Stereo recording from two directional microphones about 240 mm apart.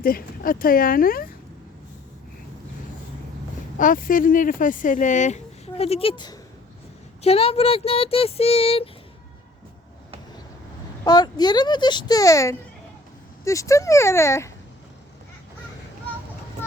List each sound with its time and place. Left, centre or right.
0.0 s speech: left
3.8 s speech: left
11.0 s speech: centre